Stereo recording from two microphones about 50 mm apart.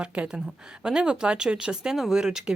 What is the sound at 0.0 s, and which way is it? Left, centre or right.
Speech, right.